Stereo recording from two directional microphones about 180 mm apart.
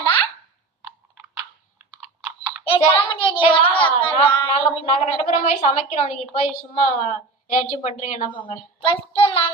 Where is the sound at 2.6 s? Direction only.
30° left (ahead or behind).